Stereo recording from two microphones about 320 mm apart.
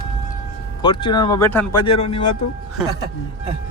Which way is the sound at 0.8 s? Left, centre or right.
Centre.